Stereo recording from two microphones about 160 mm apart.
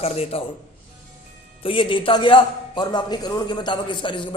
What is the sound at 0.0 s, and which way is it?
Speech, 40° left (ahead or behind).